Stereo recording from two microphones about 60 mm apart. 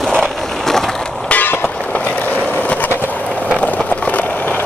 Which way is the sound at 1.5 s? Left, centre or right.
Left.